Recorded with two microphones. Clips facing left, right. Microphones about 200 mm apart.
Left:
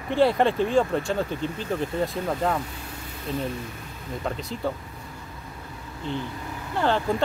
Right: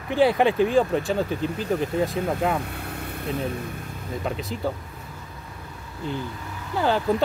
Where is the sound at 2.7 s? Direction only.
60° right (ahead or behind).